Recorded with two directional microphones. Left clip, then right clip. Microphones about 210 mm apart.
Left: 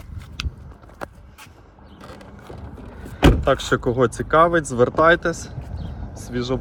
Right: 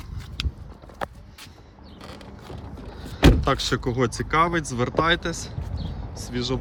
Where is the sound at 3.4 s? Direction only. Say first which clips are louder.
Left 5 dB; 5° right (ahead or behind).